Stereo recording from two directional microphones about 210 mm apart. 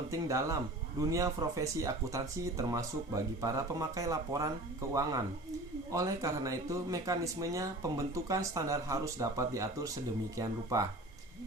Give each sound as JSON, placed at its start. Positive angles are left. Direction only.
{"t": 0.1, "sound": "speech", "side_deg": -15}